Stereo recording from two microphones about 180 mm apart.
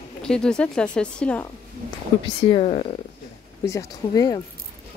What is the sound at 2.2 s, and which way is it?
Speech, 30° left (ahead or behind).